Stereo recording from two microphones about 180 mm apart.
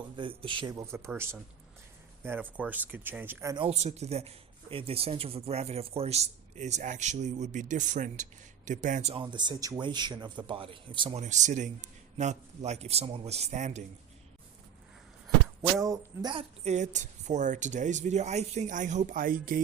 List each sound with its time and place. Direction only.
0.2 s speech: 25° right (ahead or behind); by 3.5 s 10° right (ahead or behind)
3.7 s speech: 35° right (ahead or behind)
9.2 s speech: 25° right (ahead or behind)
11.2 s speech: 40° right (ahead or behind)
15.8 s speech: 20° right (ahead or behind); by 19.6 s 50° right (ahead or behind)